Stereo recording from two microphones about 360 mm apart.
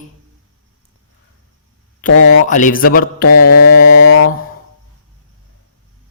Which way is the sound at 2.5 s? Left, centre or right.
Left.